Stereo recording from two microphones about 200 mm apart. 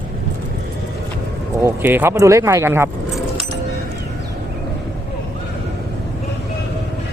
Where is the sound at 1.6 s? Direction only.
10° right (ahead or behind).